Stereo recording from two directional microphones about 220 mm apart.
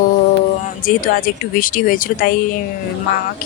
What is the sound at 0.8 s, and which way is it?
Speech, 40° left (ahead or behind).